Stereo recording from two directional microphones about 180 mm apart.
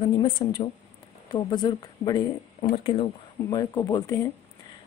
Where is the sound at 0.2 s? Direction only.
25° left (ahead or behind).